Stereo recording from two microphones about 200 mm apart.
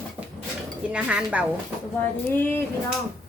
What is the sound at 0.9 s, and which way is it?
Speech, 5° right (ahead or behind).